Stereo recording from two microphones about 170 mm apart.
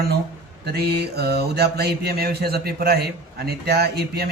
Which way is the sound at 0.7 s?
70° right (ahead or behind).